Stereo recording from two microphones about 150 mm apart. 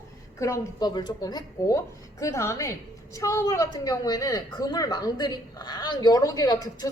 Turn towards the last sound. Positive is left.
turn(degrees=25)  # may be behind; listen again after turning